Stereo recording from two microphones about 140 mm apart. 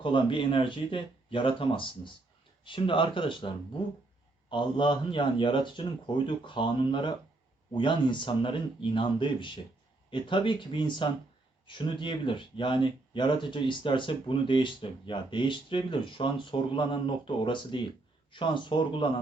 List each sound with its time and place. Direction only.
0.0 s speech: 35° left (ahead or behind)